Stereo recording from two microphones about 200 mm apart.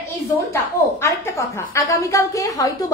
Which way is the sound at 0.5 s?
15° left (ahead or behind).